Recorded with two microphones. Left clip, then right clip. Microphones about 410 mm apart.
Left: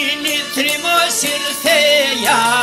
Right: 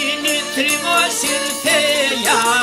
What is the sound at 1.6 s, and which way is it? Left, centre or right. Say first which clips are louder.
Music: left 4 dB; left.